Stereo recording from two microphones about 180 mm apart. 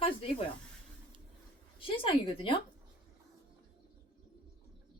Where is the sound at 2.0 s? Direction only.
30° left (ahead or behind).